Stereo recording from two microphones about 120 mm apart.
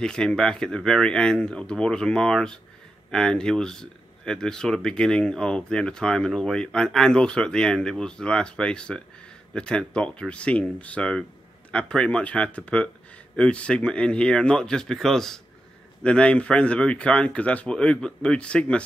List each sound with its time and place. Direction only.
0.0 s speech: 5° left (ahead or behind)